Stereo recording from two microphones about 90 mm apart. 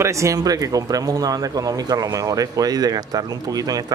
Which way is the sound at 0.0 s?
35° right (ahead or behind).